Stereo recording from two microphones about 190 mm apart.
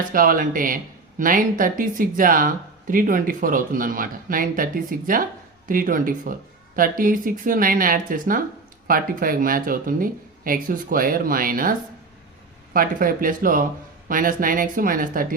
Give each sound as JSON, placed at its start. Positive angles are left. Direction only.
{"t": 0.1, "sound": "speech", "side_deg": -45}